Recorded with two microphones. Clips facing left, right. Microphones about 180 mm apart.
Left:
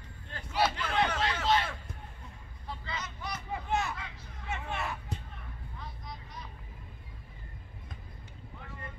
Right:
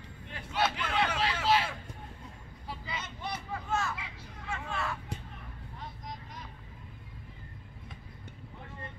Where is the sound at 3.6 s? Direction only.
20° left (ahead or behind).